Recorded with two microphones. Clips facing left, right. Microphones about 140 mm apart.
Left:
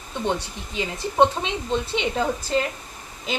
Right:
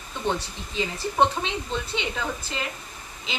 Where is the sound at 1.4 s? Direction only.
25° left (ahead or behind).